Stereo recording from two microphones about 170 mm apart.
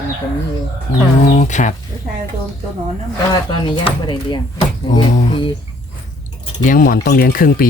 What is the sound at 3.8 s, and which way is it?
Speech, 30° left (ahead or behind).